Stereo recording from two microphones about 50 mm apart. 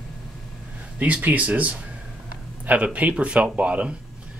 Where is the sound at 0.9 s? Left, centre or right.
Right.